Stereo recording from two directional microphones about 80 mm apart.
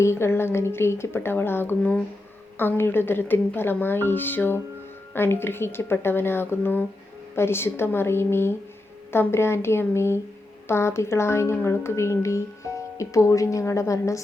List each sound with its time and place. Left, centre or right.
0.0 s speech: left